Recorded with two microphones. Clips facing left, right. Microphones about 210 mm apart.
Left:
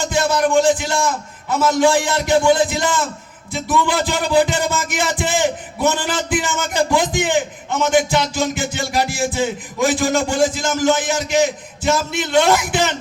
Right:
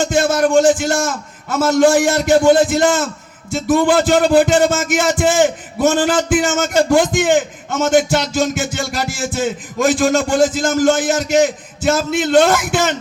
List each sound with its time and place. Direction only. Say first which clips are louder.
0.0 s a man's voice: right 3 dB; 50° right (ahead or behind)